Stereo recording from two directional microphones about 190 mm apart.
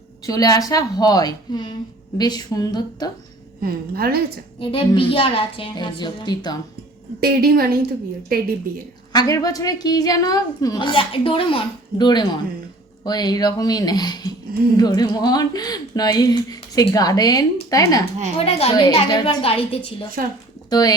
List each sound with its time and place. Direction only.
0.3 s a woman's voice: 20° left (ahead or behind)
3.6 s a woman's voice: 55° right (ahead or behind)
4.6 s a woman's voice: 30° left (ahead or behind)
7.2 s a woman's voice: 55° right (ahead or behind)
9.1 s a woman's voice: 20° left (ahead or behind)
18.3 s a woman's voice: 30° left (ahead or behind)